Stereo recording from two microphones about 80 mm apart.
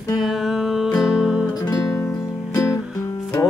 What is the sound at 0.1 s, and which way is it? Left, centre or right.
Music, centre.